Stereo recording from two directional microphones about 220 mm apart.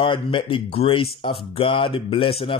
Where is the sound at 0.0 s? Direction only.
20° left (ahead or behind).